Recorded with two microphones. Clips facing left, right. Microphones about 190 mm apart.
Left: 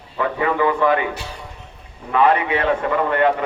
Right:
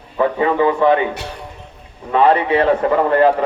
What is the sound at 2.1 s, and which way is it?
A man's voice, 30° right (ahead or behind).